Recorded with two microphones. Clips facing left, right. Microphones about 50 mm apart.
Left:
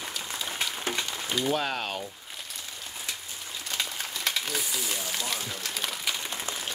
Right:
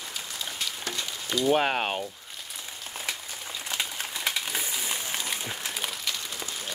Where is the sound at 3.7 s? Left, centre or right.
Centre.